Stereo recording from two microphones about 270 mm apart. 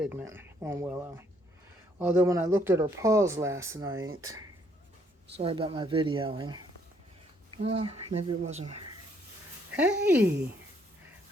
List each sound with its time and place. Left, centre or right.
0.0 s speech: centre
5.4 s speech: centre
9.7 s speech: centre